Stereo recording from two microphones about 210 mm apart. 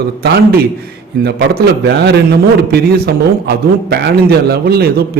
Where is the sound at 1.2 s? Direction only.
50° right (ahead or behind).